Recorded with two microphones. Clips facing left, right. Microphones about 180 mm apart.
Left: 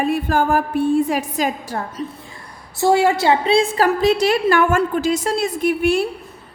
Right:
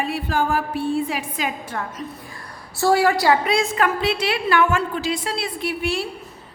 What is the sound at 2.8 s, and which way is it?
A woman's voice, 20° left (ahead or behind).